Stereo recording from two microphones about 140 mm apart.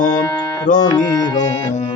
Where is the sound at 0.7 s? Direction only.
65° left (ahead or behind).